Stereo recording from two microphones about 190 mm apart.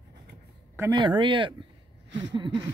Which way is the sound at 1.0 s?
25° right (ahead or behind).